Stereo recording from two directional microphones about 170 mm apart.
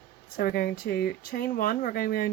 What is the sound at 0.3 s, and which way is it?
Speech, 60° left (ahead or behind).